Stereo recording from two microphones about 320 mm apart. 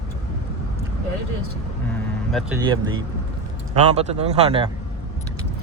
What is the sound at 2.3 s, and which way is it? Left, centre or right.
Speech, centre.